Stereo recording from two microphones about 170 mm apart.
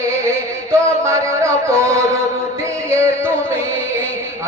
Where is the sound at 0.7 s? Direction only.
15° right (ahead or behind).